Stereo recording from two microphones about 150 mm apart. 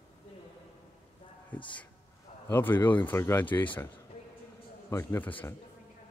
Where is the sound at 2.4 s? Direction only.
15° left (ahead or behind).